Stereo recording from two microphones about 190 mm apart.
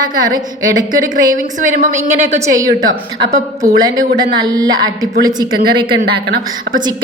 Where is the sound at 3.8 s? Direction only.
20° right (ahead or behind).